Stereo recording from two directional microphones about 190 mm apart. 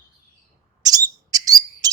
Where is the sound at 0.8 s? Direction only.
20° right (ahead or behind).